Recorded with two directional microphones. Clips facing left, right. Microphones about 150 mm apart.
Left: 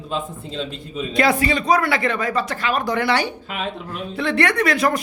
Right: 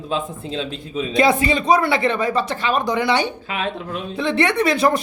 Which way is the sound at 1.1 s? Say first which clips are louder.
Right 2 dB; 20° right (ahead or behind).